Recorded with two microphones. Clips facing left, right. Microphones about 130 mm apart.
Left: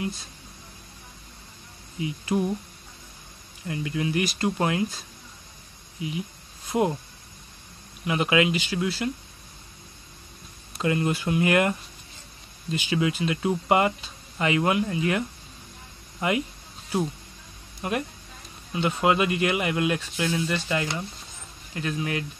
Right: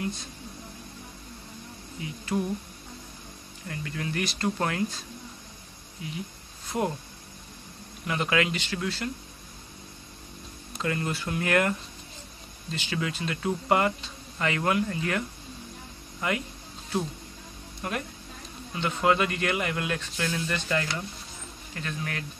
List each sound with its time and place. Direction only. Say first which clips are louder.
2.0 s speech: left 4 dB; 15° left (ahead or behind)
3.6 s speech: left 6 dB; 15° left (ahead or behind)
6.0 s a sound: left 5 dB; 10° left (ahead or behind)
8.1 s speech: left 4 dB; 10° left (ahead or behind)
10.8 s speech: left 5 dB; 15° left (ahead or behind)
12.7 s speech: left 6 dB; 15° left (ahead or behind)
17.8 s speech: left 4 dB; 15° left (ahead or behind)